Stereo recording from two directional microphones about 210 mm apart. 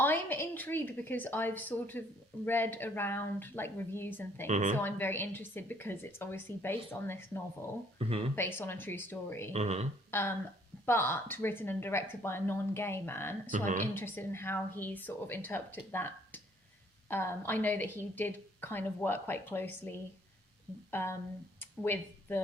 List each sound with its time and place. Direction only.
0.0 s a woman's voice: 10° left (ahead or behind)
4.4 s speech: 35° right (ahead or behind)
4.8 s a woman's voice: 10° left (ahead or behind)
9.5 s speech: 30° right (ahead or behind)
10.1 s a woman's voice: 10° left (ahead or behind)
13.5 s speech: 40° right (ahead or behind)
13.9 s a woman's voice: 10° left (ahead or behind)
21.6 s a sound: 10° left (ahead or behind)